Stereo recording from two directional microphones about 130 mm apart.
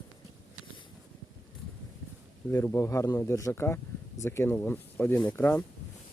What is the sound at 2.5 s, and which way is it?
Speech, 20° left (ahead or behind).